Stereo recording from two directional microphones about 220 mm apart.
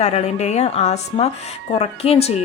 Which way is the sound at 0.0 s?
30° left (ahead or behind).